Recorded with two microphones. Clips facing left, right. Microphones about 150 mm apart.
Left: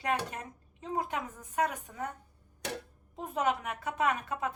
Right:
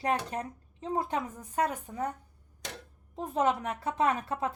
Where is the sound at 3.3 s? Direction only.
30° right (ahead or behind).